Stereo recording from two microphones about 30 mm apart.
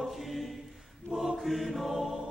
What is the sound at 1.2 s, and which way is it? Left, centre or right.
Chant, centre.